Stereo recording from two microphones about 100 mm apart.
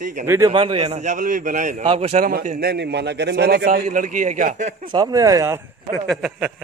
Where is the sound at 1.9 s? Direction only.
90° right.